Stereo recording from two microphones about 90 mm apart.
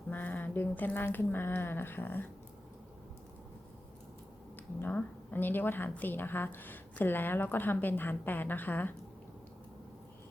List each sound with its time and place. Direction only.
0.1 s speech: 20° left (ahead or behind)
4.5 s speech: 20° left (ahead or behind)